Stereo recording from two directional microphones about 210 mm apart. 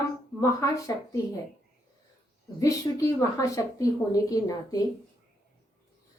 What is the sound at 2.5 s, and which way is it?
A woman's voice, 15° left (ahead or behind).